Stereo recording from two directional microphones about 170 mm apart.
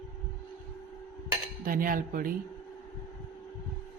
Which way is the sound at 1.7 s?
55° right (ahead or behind).